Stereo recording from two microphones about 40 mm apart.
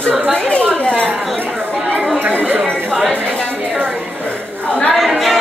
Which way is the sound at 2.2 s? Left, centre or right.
Right.